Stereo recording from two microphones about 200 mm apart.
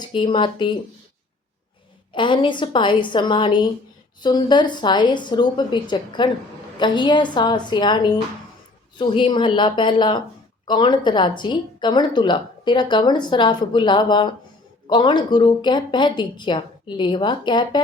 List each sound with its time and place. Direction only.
0.0 s a woman's voice: 25° left (ahead or behind)
2.1 s a woman's voice: 25° left (ahead or behind)